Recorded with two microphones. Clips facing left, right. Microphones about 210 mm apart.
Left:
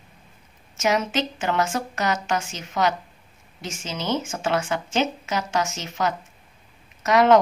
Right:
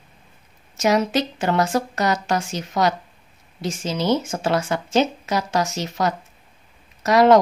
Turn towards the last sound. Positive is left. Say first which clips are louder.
# right 3 dB
turn(degrees=-35)  # may be behind; listen again after turning